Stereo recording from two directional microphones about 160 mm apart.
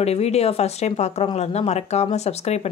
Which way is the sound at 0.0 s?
40° left (ahead or behind).